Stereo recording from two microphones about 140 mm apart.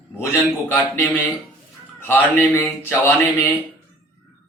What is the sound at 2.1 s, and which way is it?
Speech, 15° left (ahead or behind).